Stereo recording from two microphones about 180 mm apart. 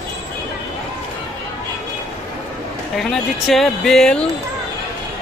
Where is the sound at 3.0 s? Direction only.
Centre (ahead or behind).